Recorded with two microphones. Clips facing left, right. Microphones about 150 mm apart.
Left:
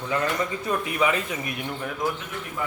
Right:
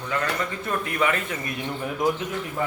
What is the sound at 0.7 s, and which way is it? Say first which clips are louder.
Speech: even; 10° left (ahead or behind).